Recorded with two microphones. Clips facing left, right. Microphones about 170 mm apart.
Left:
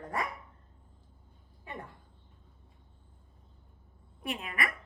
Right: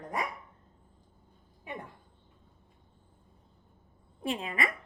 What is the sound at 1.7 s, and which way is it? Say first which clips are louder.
Speech: right 2 dB; 15° right (ahead or behind).